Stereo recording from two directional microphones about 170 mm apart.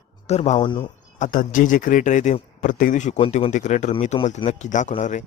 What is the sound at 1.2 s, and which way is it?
Speech, 50° left (ahead or behind).